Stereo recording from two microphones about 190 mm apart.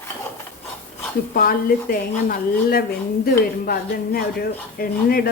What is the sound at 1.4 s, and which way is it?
Speech, 50° left (ahead or behind).